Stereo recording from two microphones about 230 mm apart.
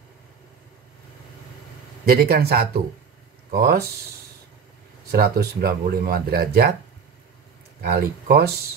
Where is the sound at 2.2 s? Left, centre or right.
Right.